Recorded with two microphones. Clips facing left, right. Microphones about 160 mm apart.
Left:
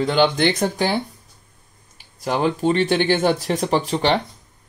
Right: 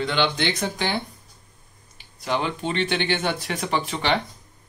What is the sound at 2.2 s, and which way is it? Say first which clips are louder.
Speech: left 6 dB; 45° left (ahead or behind).